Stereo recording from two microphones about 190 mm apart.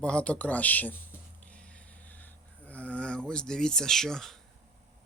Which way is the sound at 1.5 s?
5° left (ahead or behind).